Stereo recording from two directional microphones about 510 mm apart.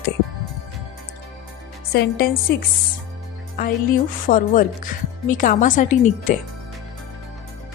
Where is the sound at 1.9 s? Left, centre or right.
Centre.